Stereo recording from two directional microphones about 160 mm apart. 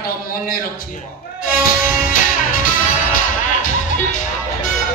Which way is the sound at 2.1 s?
55° left (ahead or behind).